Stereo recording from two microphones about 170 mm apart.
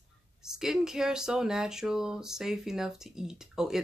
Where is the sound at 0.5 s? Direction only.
5° right (ahead or behind).